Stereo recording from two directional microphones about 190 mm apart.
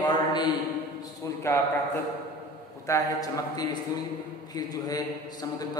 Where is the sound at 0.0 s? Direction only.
25° left (ahead or behind).